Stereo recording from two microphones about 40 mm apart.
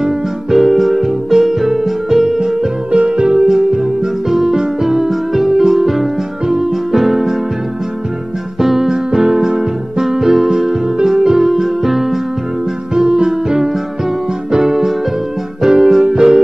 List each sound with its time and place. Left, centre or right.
0.6 s music: centre
6.4 s music: centre
6.7 s music: centre
8.5 s music: centre
12.9 s music: centre
14.6 s keyboard: centre
15.6 s music: centre